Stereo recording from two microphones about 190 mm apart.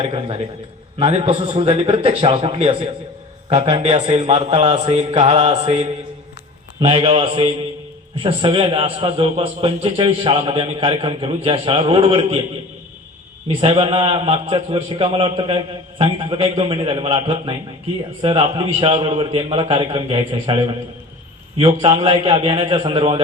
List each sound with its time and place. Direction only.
0.0 s a man's voice: 30° right (ahead or behind)
13.6 s a man's voice: 30° right (ahead or behind)